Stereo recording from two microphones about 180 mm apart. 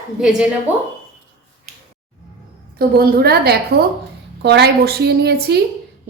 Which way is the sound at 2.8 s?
55° right (ahead or behind).